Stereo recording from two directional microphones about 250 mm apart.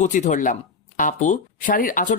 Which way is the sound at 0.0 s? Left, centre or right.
Left.